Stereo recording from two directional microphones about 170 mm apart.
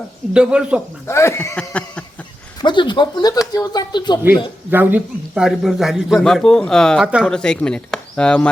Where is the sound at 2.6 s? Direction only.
25° left (ahead or behind).